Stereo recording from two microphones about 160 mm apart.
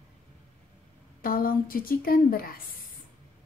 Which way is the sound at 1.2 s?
65° left (ahead or behind).